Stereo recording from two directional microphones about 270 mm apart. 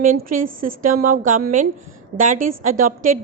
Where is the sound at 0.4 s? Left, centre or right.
Right.